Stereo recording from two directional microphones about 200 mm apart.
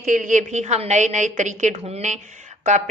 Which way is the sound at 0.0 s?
40° right (ahead or behind).